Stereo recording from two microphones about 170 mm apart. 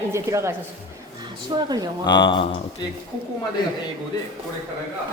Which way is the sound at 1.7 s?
25° right (ahead or behind).